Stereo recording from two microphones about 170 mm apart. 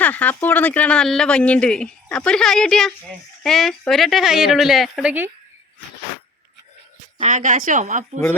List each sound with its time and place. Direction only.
0.0 s speech: 10° left (ahead or behind)
7.2 s a woman's voice: 45° right (ahead or behind)